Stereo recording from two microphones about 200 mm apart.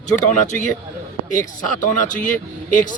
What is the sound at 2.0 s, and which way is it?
Speech, 40° left (ahead or behind).